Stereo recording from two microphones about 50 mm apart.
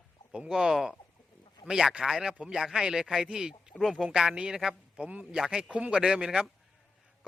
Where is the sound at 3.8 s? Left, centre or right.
Centre.